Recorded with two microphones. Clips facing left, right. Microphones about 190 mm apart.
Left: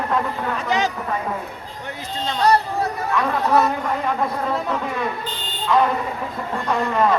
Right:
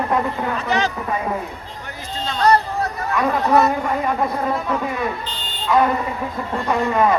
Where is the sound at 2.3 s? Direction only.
10° left (ahead or behind).